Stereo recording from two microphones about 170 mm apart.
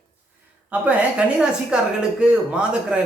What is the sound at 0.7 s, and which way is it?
Speech, 10° right (ahead or behind).